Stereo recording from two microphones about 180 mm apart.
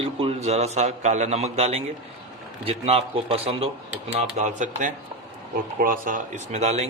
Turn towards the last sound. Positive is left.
turn(degrees=-40)  # may be behind; listen again after turning